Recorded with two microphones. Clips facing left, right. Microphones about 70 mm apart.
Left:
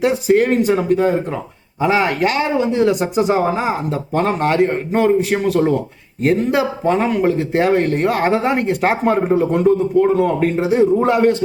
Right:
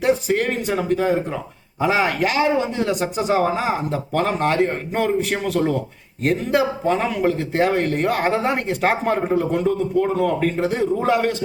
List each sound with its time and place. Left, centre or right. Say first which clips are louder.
0.0 s speech: left 5 dB; centre
10.2 s a man's voice: left 3 dB; centre
10.6 s speech: left 6 dB; centre